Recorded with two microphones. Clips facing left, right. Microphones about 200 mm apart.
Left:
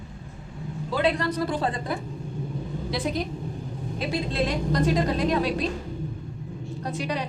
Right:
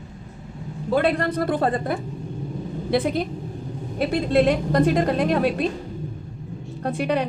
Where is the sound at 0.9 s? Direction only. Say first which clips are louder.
Right 4 dB; 55° right (ahead or behind).